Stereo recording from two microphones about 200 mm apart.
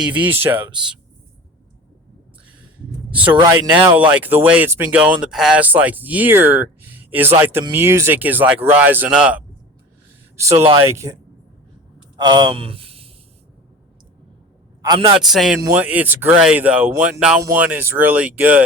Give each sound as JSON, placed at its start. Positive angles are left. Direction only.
{"t": 0.3, "sound": "speech", "side_deg": -10}
{"t": 3.3, "sound": "speech", "side_deg": -20}
{"t": 3.7, "sound": "speech", "side_deg": -10}
{"t": 12.1, "sound": "speech", "side_deg": -20}
{"t": 14.8, "sound": "a man's voice", "side_deg": -20}
{"t": 15.2, "sound": "speech", "side_deg": 0}